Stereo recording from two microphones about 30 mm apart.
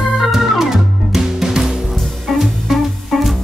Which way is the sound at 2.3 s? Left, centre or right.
Centre.